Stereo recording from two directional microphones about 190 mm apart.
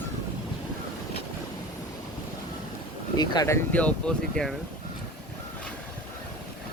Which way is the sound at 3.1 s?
20° left (ahead or behind).